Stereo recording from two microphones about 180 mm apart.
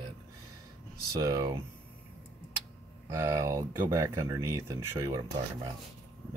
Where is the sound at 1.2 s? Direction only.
20° right (ahead or behind).